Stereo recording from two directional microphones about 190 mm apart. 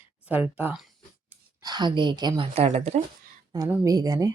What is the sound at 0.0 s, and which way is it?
Speech, 10° right (ahead or behind).